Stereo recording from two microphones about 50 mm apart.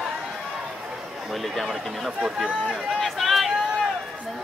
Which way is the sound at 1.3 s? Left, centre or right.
Centre.